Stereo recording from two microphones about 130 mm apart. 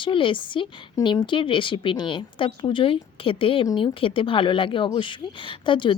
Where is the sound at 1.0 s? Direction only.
25° left (ahead or behind).